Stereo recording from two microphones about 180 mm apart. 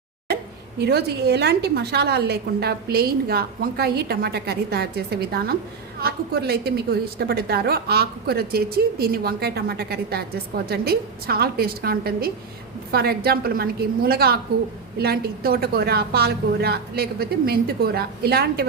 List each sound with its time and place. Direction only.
0.8 s a woman's voice: 60° right (ahead or behind)